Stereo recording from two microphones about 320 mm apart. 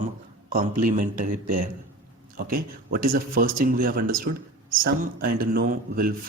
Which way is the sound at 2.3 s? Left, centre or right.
Right.